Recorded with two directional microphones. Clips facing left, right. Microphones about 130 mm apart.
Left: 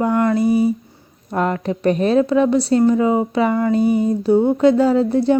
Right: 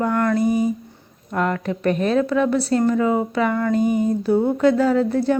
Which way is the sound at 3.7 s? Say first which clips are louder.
Left 2 dB; 45° right (ahead or behind).